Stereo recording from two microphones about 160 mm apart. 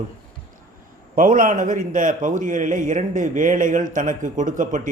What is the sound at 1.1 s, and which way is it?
A man's voice, 55° right (ahead or behind).